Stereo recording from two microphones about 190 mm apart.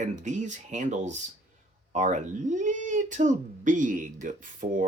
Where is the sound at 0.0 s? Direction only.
40° right (ahead or behind).